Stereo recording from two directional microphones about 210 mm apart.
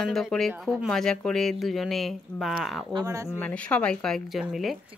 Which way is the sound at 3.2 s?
10° left (ahead or behind).